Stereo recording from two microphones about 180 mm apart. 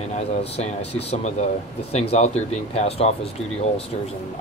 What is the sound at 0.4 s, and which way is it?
Speech, 35° left (ahead or behind).